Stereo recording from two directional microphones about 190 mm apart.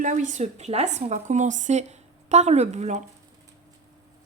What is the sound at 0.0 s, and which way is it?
Speech, 40° right (ahead or behind).